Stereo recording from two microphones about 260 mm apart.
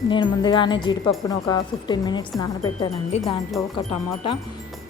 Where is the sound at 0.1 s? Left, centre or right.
Centre.